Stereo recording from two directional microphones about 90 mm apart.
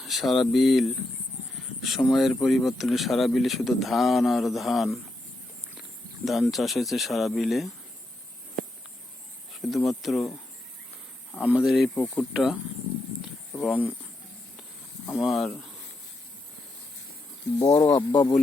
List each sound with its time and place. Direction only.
0.0 s speech: centre (ahead or behind)
6.2 s speech: centre (ahead or behind)
9.5 s speech: centre (ahead or behind)
11.4 s speech: 10° right (ahead or behind)
11.9 s speech: 10° left (ahead or behind)
12.3 s speech: 5° right (ahead or behind)
15.1 s speech: centre (ahead or behind)
17.6 s speech: 45° left (ahead or behind)
18.1 s speech: 60° left (ahead or behind)